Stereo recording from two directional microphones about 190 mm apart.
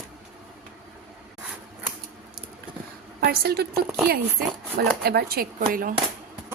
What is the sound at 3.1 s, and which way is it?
Speech, 55° right (ahead or behind).